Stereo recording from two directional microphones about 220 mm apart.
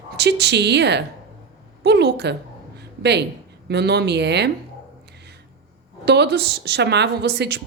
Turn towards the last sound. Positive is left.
turn(degrees=-50)  # may be behind; listen again after turning